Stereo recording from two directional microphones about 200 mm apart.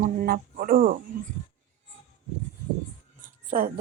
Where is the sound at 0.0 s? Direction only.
45° right (ahead or behind).